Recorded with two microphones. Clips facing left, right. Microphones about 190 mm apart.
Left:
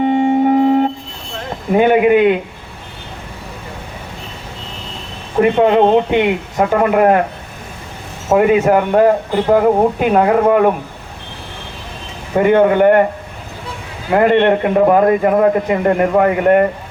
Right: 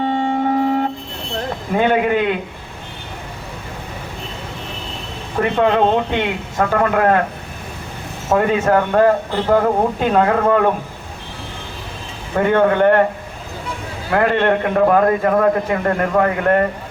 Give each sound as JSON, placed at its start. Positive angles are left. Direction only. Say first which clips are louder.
{"t": 0.1, "sound": "music", "louder": "left 6 dB", "side_deg": 15}
{"t": 1.7, "sound": "a man's voice", "louder": "left 6 dB", "side_deg": 15}
{"t": 5.4, "sound": "a man's voice", "louder": "left 5 dB", "side_deg": 15}
{"t": 8.3, "sound": "a man's voice", "louder": "left 4 dB", "side_deg": 15}
{"t": 12.4, "sound": "a man's voice", "louder": "left 4 dB", "side_deg": 15}
{"t": 14.1, "sound": "a man's voice", "louder": "left 4 dB", "side_deg": 20}